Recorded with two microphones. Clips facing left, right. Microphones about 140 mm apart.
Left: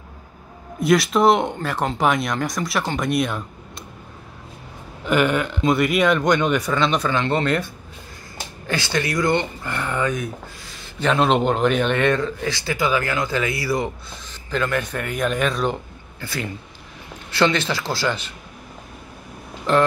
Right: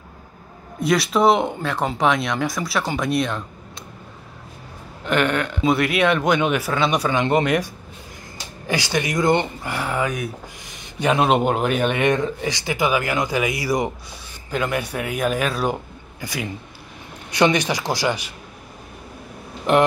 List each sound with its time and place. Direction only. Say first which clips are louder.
0.7 s speech: left 2 dB; centre (ahead or behind)
5.0 s speech: left 1 dB; 5° left (ahead or behind); by 18.3 s 15° right (ahead or behind)
19.7 s speech: right 1 dB; 20° right (ahead or behind)